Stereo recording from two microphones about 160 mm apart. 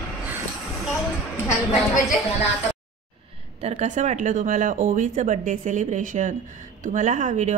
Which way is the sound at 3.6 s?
50° right (ahead or behind).